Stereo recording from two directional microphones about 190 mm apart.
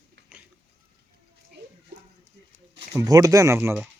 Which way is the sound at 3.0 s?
20° right (ahead or behind).